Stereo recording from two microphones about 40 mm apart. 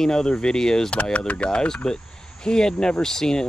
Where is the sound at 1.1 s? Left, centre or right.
Left; by 3.5 s centre.